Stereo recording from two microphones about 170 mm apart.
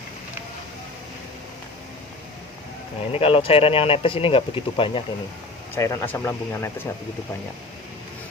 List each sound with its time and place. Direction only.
3.1 s speech: 35° left (ahead or behind)
5.7 s speech: 15° left (ahead or behind)